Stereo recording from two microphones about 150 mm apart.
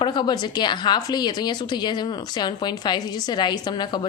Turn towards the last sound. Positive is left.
turn(degrees=30)  # may be behind; listen again after turning